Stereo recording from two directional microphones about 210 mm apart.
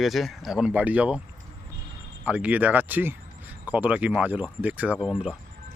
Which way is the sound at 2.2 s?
5° right (ahead or behind).